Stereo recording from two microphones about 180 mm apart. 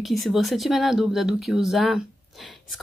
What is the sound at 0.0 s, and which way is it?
Speech, centre (ahead or behind).